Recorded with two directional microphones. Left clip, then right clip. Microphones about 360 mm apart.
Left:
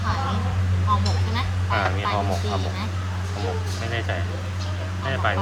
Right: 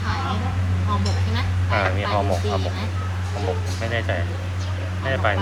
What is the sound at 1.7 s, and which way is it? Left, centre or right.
Radio, centre.